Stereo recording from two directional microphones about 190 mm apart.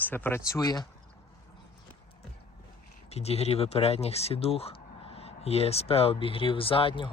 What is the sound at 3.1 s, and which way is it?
Speech, 35° left (ahead or behind).